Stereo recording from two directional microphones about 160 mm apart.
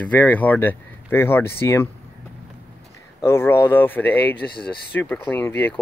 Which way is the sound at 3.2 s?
15° left (ahead or behind).